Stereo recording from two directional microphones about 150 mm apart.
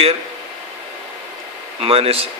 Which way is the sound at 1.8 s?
40° right (ahead or behind).